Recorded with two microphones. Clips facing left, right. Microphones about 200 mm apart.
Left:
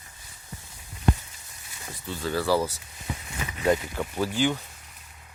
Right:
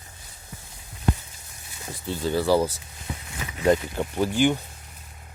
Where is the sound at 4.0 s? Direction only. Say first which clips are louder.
Right 4 dB; 15° right (ahead or behind).